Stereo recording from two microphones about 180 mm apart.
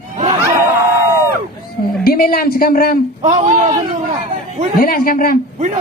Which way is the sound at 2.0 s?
55° left (ahead or behind).